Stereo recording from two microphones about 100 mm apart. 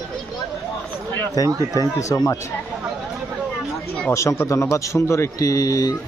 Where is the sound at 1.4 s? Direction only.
35° left (ahead or behind).